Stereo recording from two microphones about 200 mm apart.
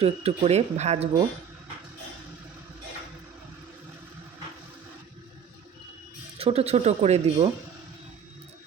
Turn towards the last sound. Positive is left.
turn(degrees=-30)  # may be behind; listen again after turning